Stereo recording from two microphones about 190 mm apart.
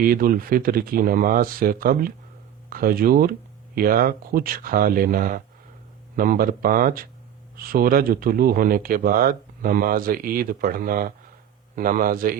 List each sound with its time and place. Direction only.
0.0 s speech: 50° right (ahead or behind)